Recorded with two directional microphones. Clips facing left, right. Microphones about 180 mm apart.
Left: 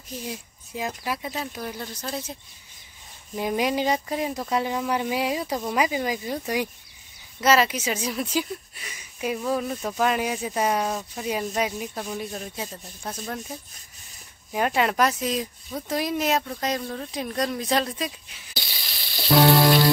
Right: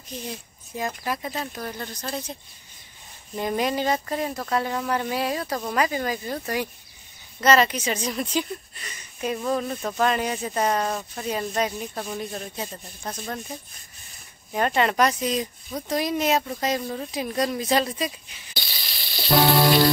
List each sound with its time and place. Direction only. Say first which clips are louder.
0.2 s speech: left 1 dB; 5° left (ahead or behind)
3.3 s speech: even; 10° left (ahead or behind)